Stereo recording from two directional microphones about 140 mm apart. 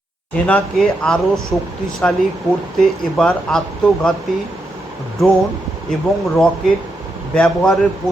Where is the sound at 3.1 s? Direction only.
5° left (ahead or behind).